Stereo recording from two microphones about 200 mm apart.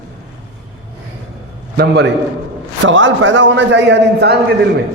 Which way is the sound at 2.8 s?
65° right (ahead or behind).